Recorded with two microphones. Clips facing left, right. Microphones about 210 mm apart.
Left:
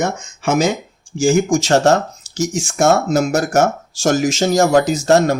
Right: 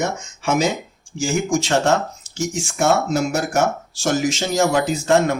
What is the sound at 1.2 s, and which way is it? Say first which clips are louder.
Speech: left 6 dB; 45° left (ahead or behind).